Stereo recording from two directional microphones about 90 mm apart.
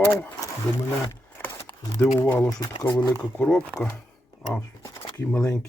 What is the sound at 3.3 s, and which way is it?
Speech, 10° left (ahead or behind).